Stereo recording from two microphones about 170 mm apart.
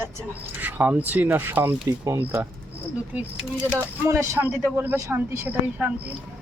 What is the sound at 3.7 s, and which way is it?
Speech, 15° right (ahead or behind).